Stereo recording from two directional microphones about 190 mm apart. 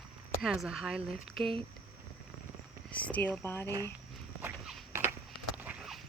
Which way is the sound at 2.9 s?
5° left (ahead or behind).